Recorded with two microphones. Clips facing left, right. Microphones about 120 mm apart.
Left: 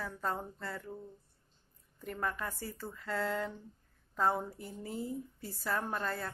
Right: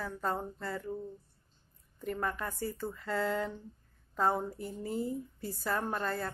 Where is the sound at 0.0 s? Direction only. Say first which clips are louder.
Right 2 dB; centre (ahead or behind).